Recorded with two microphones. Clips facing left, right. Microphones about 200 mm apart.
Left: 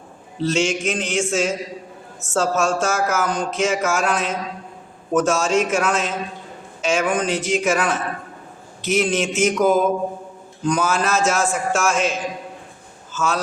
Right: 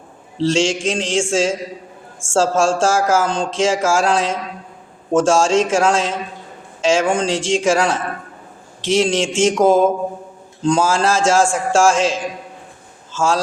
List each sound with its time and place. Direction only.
0.3 s speech: 30° right (ahead or behind)